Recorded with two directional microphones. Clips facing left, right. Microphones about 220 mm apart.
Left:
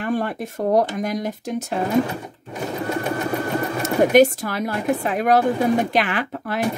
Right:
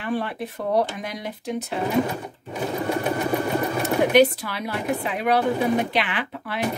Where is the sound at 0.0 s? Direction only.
45° left (ahead or behind).